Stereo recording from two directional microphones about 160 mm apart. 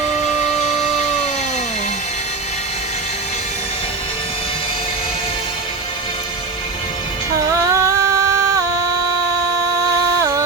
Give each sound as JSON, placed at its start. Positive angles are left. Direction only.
{"t": 7.7, "sound": "music", "side_deg": -15}